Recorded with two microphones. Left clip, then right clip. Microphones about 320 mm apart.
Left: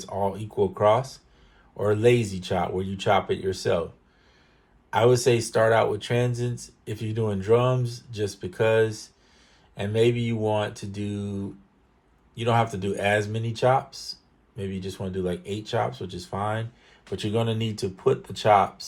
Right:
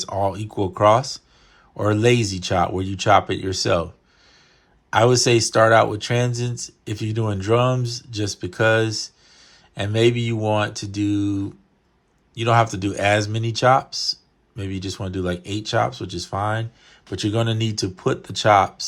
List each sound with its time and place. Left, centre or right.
0.0 s speech: right
4.9 s speech: right